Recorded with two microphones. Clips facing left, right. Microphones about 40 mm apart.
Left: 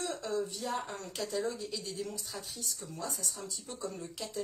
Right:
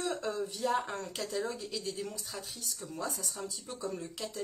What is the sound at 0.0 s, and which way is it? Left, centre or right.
Speech, centre.